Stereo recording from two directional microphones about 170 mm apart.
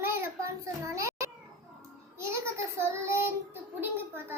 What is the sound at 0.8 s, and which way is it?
Children playing, 20° right (ahead or behind).